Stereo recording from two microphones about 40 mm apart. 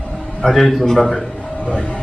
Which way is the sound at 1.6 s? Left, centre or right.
Left.